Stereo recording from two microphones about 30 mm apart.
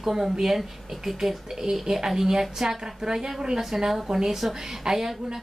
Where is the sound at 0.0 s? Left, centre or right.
Centre.